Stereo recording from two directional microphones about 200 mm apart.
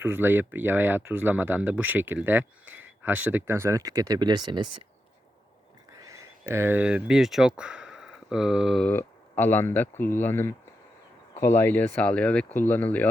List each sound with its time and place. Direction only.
0.0 s speech: 10° right (ahead or behind)
2.6 s a sound: 80° right
3.3 s speech: 10° right (ahead or behind)
6.0 s a sound: 15° right (ahead or behind)
6.5 s speech: 10° right (ahead or behind)
8.9 s speech: 10° left (ahead or behind)